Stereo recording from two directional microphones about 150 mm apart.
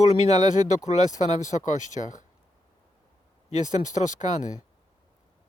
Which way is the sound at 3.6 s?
55° left (ahead or behind).